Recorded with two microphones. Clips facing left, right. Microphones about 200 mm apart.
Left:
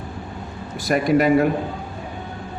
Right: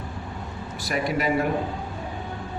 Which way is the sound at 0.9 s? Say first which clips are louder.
Left 7 dB; 50° left (ahead or behind).